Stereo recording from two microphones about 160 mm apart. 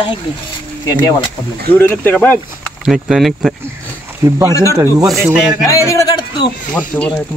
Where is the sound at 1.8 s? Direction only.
10° left (ahead or behind).